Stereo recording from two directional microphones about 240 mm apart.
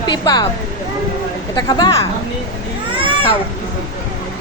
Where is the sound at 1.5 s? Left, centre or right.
Centre.